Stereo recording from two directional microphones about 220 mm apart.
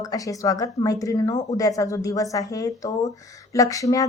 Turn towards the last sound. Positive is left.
turn(degrees=15)  # may be behind; listen again after turning